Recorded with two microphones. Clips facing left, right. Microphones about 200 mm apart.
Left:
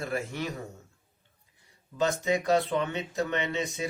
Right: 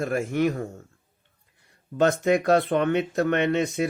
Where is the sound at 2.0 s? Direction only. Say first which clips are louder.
Right 6 dB; 60° right (ahead or behind).